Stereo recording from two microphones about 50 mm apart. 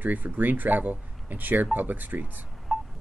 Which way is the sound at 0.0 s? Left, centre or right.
Right.